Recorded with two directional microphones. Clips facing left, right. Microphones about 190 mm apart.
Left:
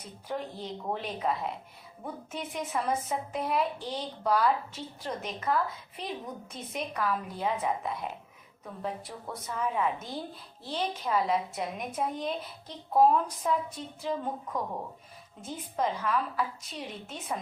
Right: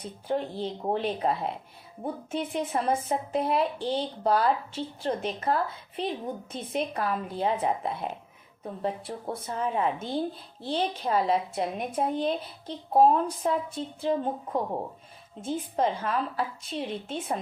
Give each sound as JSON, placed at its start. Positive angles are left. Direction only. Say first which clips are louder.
{"t": 0.0, "sound": "a woman's voice", "louder": "right 6 dB", "side_deg": -30}